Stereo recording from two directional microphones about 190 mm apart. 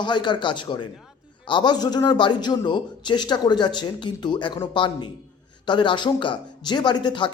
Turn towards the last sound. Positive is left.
turn(degrees=25)  # may be behind; listen again after turning